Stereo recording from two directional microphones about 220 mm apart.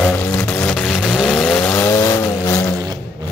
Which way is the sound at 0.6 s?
Centre (ahead or behind).